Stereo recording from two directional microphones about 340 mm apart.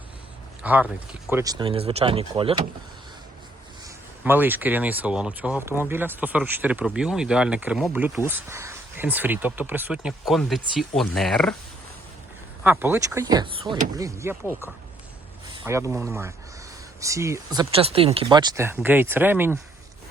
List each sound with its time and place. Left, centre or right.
0.6 s speech: centre
3.8 s speech: centre
12.6 s speech: centre
13.9 s speech: centre
15.5 s speech: centre